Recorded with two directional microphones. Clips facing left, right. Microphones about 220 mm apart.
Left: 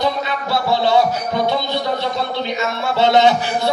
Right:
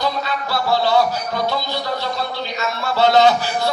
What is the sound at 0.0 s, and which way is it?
Music, 20° left (ahead or behind).